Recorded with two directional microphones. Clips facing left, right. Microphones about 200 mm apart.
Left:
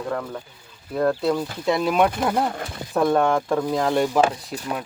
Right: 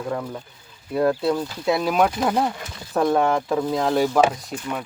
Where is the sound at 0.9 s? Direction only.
5° right (ahead or behind).